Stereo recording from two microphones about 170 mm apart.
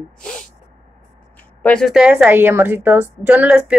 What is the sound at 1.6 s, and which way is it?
A woman's voice, 5° left (ahead or behind).